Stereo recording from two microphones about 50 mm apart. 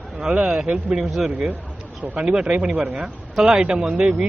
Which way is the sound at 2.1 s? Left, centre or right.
Centre.